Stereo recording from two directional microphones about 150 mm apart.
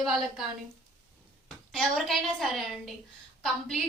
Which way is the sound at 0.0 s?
Centre (ahead or behind).